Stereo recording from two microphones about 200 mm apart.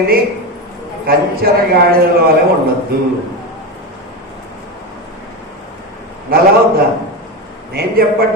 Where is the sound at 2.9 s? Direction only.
50° right (ahead or behind).